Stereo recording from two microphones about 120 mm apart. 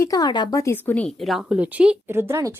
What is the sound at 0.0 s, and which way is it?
Speech, 30° left (ahead or behind).